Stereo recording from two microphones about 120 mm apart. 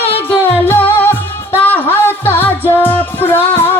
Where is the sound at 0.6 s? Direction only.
20° left (ahead or behind).